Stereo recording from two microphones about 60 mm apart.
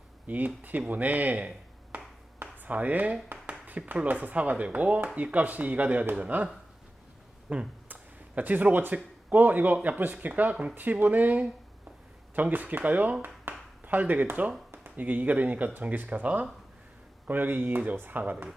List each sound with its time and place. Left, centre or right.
0.3 s speech: right
2.4 s a sound: right
3.7 s speech: right
7.5 s speech: centre
13.5 s a sound: right
13.8 s speech: right